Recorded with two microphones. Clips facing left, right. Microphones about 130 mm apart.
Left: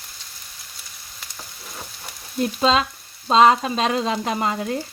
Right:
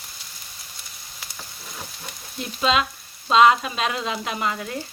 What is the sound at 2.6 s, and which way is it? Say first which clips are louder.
Frying: left 1 dB; 35° left (ahead or behind).